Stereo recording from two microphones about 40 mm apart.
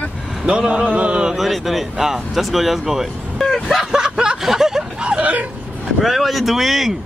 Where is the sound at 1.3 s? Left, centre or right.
Centre.